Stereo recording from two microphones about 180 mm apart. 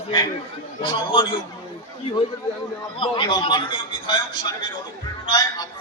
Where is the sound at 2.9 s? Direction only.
30° left (ahead or behind).